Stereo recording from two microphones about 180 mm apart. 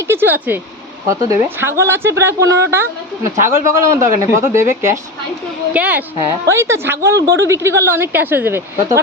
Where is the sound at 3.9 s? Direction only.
15° right (ahead or behind).